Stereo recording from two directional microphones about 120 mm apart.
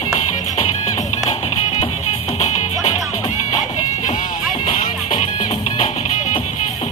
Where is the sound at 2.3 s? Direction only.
70° left (ahead or behind).